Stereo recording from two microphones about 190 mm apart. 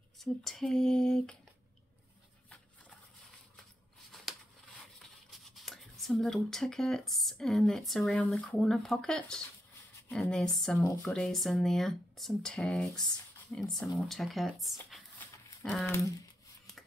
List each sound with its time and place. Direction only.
0.2 s speech: centre (ahead or behind)
4.9 s speech: centre (ahead or behind)
10.8 s speech: 15° left (ahead or behind)
11.1 s speech: centre (ahead or behind)